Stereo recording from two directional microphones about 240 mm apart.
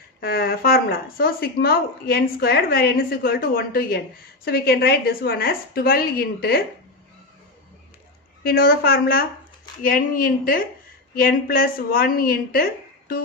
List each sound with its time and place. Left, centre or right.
0.2 s speech: left
8.4 s speech: left